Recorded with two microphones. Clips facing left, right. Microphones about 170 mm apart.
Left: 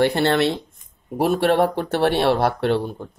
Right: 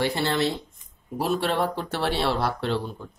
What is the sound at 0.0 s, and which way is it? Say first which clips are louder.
Speech: left 6 dB; 60° left (ahead or behind).